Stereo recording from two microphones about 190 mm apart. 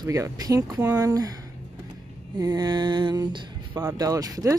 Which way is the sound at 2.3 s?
20° right (ahead or behind).